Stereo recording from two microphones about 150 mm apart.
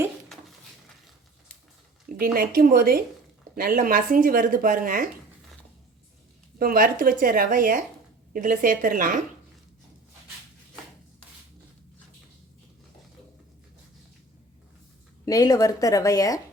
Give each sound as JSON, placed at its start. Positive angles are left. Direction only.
{"t": 2.0, "sound": "speech", "side_deg": -80}
{"t": 6.6, "sound": "speech", "side_deg": -75}
{"t": 15.2, "sound": "a woman's voice", "side_deg": 25}